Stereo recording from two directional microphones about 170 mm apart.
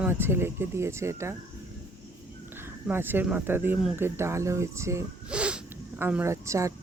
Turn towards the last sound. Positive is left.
turn(degrees=-15)  # may be behind; listen again after turning